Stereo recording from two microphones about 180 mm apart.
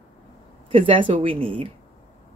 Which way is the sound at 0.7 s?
30° right (ahead or behind).